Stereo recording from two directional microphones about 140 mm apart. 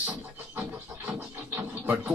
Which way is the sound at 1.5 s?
15° right (ahead or behind).